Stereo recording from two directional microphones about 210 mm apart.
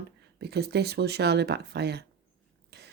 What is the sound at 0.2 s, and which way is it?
A woman's voice, 50° right (ahead or behind).